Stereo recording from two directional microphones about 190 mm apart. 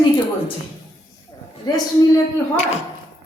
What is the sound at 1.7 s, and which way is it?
Speech, 20° left (ahead or behind).